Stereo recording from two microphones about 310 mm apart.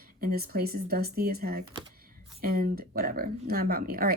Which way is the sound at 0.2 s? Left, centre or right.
Right.